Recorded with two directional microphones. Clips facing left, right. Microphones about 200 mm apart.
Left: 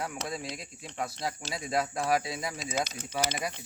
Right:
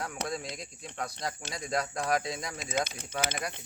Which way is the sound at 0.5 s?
5° left (ahead or behind).